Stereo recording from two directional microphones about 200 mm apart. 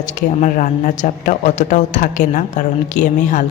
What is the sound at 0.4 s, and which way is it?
Speech, 40° left (ahead or behind).